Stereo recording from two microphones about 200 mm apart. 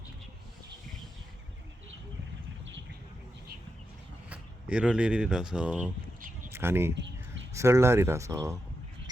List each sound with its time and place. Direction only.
4.3 s speech: 5° right (ahead or behind)
6.9 s a sound: 65° right (ahead or behind)
7.5 s speech: 15° right (ahead or behind)